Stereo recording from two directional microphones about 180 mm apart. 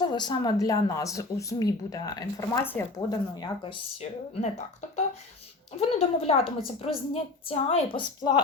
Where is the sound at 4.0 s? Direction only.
35° left (ahead or behind).